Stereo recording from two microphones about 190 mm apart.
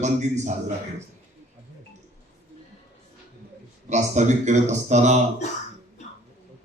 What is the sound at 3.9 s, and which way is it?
A man's voice, 40° right (ahead or behind).